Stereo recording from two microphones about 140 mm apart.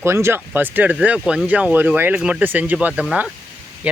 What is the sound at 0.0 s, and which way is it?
Speech, 20° right (ahead or behind).